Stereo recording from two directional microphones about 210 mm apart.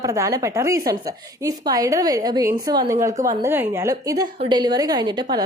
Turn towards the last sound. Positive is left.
turn(degrees=-20)  # may be behind; listen again after turning